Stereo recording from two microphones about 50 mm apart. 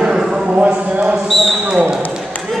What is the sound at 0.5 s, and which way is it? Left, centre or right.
Speech, right.